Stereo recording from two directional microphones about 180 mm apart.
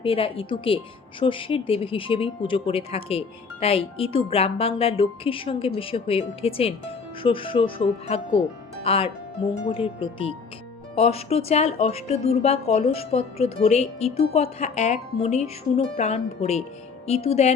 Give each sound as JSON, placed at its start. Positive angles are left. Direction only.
{"t": 0.0, "sound": "speech", "side_deg": 30}